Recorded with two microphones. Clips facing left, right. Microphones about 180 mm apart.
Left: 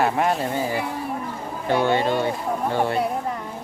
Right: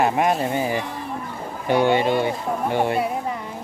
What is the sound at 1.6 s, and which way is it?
Speech, 15° right (ahead or behind).